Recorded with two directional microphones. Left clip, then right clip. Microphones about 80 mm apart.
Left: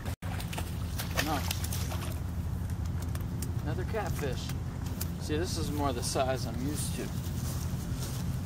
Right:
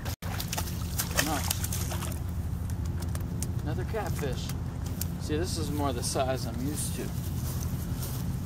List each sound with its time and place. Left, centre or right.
0.6 s boat: right
3.6 s speech: centre
5.3 s speech: centre